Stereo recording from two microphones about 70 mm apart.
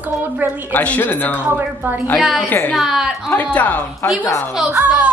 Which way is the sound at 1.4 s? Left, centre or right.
Right.